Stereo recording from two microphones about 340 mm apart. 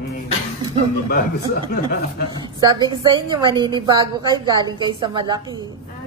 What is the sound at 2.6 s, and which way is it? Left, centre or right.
A woman's voice, centre.